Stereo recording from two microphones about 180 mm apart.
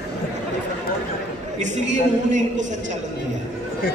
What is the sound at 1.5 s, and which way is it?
A man's voice, 40° right (ahead or behind).